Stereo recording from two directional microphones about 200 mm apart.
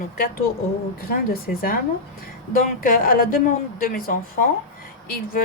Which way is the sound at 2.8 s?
45° left (ahead or behind).